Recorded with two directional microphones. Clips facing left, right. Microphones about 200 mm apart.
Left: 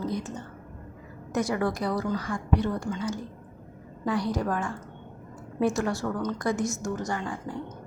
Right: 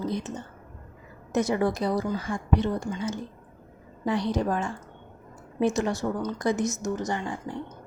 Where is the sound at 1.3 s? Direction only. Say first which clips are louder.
Right 2 dB; 25° right (ahead or behind).